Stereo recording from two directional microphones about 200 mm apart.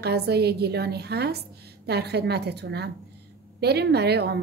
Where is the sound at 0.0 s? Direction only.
55° right (ahead or behind).